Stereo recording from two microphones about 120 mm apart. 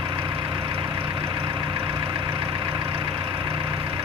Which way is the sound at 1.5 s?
35° right (ahead or behind).